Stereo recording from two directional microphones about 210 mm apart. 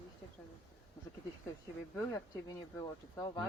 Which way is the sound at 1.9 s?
15° left (ahead or behind).